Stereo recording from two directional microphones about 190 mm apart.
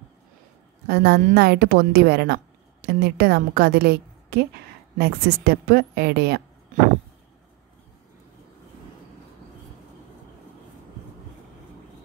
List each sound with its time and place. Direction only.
0.8 s a woman's voice: 55° right (ahead or behind)